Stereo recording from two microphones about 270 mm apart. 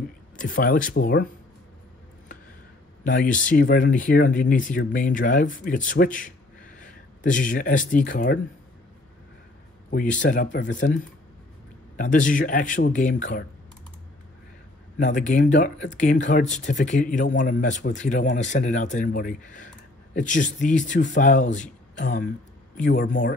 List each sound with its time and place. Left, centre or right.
0.4 s speech: left
3.0 s speech: left
9.8 s speech: left
12.0 s speech: left
15.0 s speech: left